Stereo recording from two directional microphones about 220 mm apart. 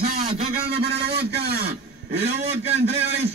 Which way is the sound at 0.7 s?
50° right (ahead or behind).